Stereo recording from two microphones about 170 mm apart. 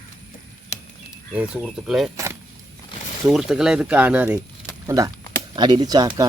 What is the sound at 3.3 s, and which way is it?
Speech, 5° right (ahead or behind).